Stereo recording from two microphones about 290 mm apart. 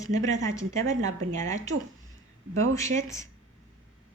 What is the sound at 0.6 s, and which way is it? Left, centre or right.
Speech, right.